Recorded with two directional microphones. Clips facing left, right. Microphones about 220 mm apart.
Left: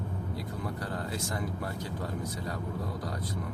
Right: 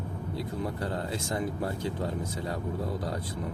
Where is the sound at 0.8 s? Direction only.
25° right (ahead or behind).